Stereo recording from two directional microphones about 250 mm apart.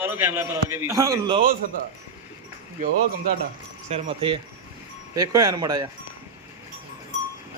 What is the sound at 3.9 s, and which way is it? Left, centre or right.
Speech, right.